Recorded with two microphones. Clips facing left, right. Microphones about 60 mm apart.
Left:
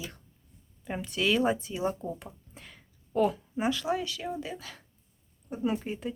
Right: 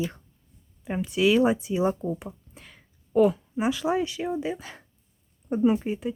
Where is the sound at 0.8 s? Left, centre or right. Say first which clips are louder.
Right 7 dB; centre.